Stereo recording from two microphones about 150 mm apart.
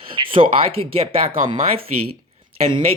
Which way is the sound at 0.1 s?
35° right (ahead or behind).